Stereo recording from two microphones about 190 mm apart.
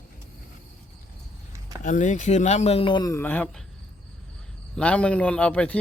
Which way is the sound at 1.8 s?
40° left (ahead or behind).